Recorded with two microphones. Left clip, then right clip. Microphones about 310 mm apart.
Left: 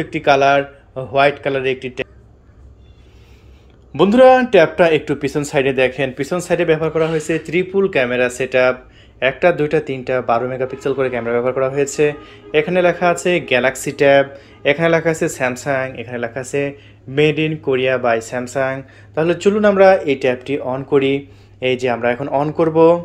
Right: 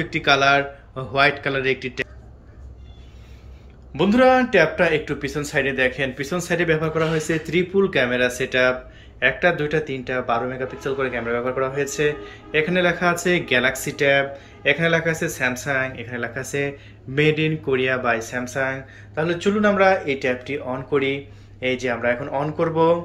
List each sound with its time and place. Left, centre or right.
0.0 s a man's voice: centre
3.9 s a man's voice: centre